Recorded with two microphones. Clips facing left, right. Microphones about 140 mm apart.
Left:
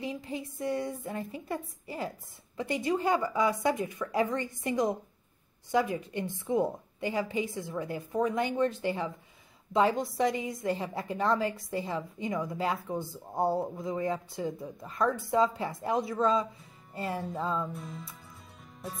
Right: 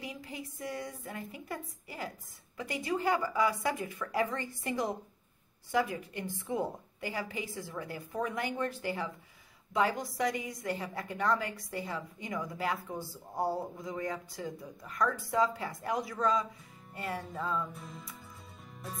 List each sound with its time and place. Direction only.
0.0 s speech: 25° left (ahead or behind)
16.9 s music: 30° left (ahead or behind)
17.3 s speech: 30° left (ahead or behind)
17.7 s speech: centre (ahead or behind)
18.6 s music: centre (ahead or behind)